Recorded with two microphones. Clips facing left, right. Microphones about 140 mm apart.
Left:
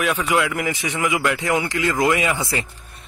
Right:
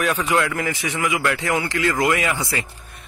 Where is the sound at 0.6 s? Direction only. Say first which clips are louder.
Left 1 dB; 20° left (ahead or behind).